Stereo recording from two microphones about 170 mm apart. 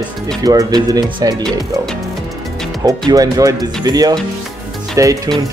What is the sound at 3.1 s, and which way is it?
Speech, 20° right (ahead or behind).